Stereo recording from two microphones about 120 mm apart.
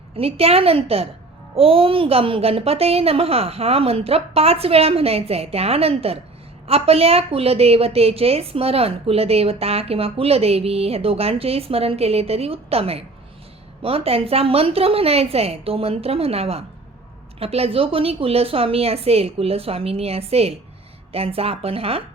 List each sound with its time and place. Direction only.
0.2 s a woman's voice: 55° right (ahead or behind)